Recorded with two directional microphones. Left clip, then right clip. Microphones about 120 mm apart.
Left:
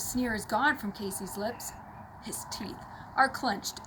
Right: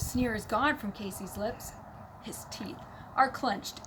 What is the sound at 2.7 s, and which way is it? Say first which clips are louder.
Speech: left 1 dB; 15° right (ahead or behind).